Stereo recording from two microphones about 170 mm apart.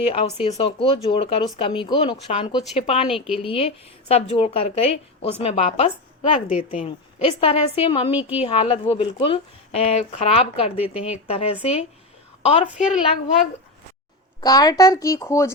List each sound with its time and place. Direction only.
0.0 s a woman's voice: 35° left (ahead or behind)
3.2 s a woman's voice: centre (ahead or behind)
3.4 s a woman's voice: 35° left (ahead or behind)
14.4 s speech: 20° left (ahead or behind)